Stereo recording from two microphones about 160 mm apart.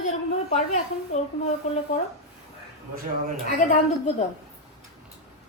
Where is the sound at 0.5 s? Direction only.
45° left (ahead or behind).